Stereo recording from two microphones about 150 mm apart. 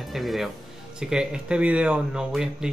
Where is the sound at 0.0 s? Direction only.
Centre (ahead or behind).